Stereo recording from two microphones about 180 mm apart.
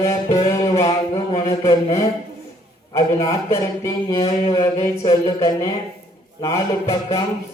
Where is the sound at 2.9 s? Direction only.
30° left (ahead or behind).